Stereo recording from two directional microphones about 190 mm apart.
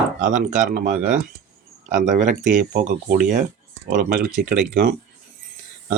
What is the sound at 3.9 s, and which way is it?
Speech, 55° right (ahead or behind).